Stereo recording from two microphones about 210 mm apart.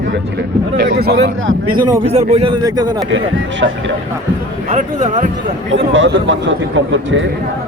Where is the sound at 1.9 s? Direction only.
25° right (ahead or behind).